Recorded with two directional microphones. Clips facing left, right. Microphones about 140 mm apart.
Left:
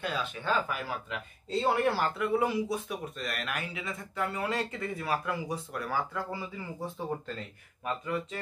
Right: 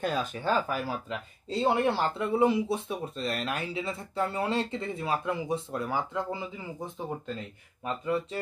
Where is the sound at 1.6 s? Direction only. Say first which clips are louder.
Right 2 dB; 20° right (ahead or behind).